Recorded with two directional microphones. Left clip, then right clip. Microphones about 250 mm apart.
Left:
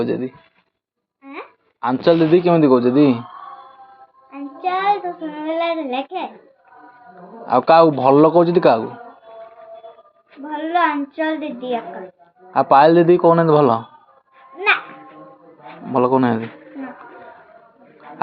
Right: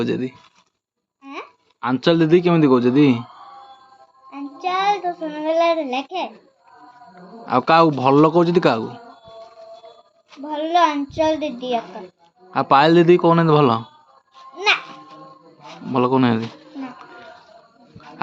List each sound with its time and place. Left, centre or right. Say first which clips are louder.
0.0 s a man's voice: left 2 dB; right
1.2 s speech: even; right
4.3 s child singing: left 2 dB; right
7.4 s a man's voice: left 3 dB; right
10.3 s a child's voice: right 1 dB; right
15.9 s a man's voice: left 2 dB; right